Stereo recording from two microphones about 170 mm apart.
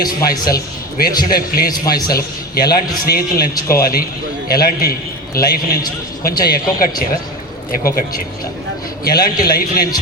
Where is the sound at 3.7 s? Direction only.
60° left (ahead or behind).